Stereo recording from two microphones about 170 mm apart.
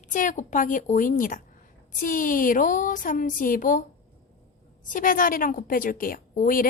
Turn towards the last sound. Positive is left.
turn(degrees=55)  # may be behind; listen again after turning